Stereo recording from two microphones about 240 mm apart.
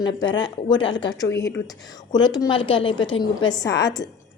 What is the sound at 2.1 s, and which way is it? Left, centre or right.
A woman's voice, centre.